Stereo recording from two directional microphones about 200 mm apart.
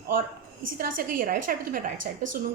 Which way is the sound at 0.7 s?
45° right (ahead or behind).